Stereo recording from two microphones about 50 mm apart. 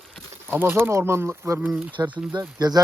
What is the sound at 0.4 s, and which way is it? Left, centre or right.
Speech, right.